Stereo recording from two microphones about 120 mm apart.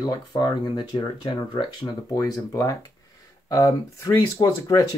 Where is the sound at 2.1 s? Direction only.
25° left (ahead or behind).